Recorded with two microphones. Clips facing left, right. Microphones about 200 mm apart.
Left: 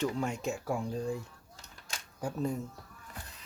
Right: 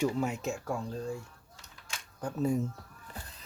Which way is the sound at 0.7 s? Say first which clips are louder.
Left 2 dB; 15° left (ahead or behind).